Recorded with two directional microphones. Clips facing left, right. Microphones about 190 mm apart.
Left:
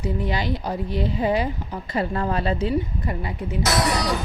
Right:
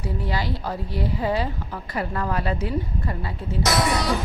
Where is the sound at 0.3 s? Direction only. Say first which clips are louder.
Left 2 dB; 20° left (ahead or behind).